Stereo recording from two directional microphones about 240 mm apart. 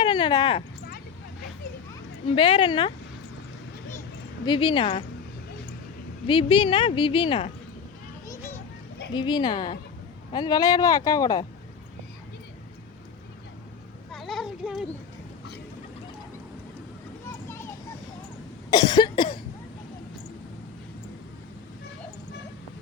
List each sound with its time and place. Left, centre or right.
0.0 s speech: centre
2.3 s a woman's voice: left
4.4 s a woman's voice: centre
6.2 s a woman's voice: left
9.1 s a woman's voice: centre
14.1 s a sound: centre
18.7 s cough: centre